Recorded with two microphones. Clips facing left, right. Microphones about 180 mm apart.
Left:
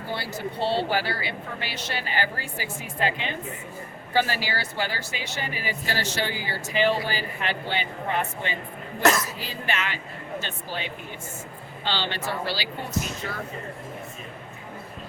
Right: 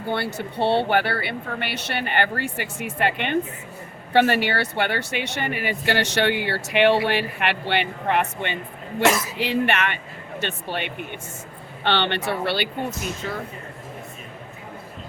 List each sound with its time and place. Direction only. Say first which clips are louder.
0.1 s speech: right 5 dB; 60° right (ahead or behind)